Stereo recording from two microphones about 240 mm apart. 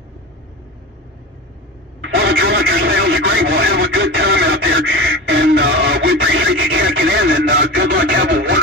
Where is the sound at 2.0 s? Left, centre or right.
Right.